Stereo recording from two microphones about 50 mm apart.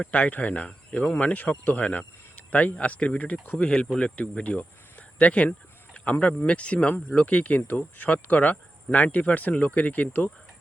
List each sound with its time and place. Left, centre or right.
0.0 s speech: left
3.5 s speech: centre; by 10.2 s left